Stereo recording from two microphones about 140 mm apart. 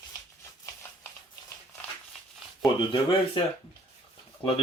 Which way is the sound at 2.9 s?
40° left (ahead or behind).